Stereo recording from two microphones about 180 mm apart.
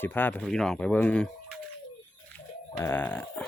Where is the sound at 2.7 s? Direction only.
10° left (ahead or behind).